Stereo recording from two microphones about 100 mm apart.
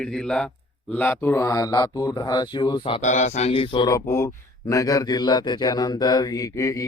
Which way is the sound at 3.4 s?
75° left (ahead or behind).